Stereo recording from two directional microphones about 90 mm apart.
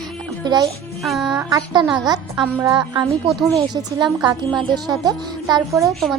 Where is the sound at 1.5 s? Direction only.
50° right (ahead or behind).